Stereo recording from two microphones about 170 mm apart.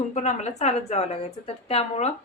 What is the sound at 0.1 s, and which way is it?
A woman's voice, 40° left (ahead or behind).